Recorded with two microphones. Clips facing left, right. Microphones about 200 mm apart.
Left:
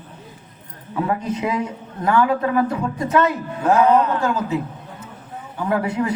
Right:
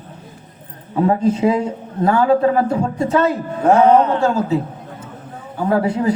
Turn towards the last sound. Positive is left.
turn(degrees=-30)  # may be behind; listen again after turning